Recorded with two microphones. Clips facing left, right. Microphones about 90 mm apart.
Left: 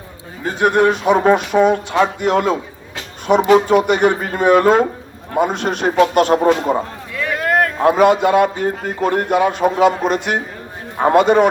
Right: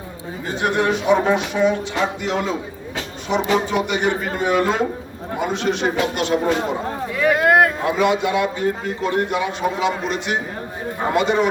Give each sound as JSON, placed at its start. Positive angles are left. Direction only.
{"t": 0.6, "sound": "a man's voice", "side_deg": 50}
{"t": 7.2, "sound": "vehicle", "side_deg": -15}
{"t": 7.9, "sound": "a man's voice", "side_deg": 45}